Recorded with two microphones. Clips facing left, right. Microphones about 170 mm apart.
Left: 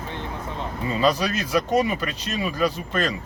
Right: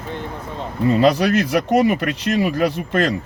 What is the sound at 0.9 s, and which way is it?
Speech, 60° right (ahead or behind).